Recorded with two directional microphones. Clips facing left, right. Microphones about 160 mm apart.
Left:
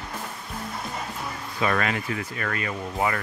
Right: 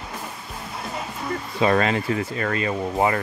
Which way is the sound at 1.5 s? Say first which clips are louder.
Right 5 dB; 25° right (ahead or behind).